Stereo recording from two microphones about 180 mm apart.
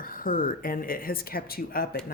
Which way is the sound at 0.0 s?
50° left (ahead or behind).